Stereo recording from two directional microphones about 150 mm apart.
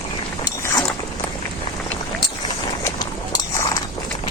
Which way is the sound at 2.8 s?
20° left (ahead or behind).